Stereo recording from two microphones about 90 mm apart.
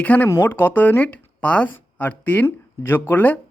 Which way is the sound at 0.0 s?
15° left (ahead or behind).